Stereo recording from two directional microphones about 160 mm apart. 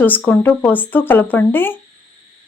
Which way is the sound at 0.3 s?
10° left (ahead or behind).